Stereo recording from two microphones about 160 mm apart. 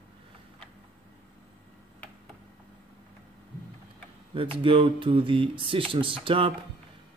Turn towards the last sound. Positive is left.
turn(degrees=-35)  # may be behind; listen again after turning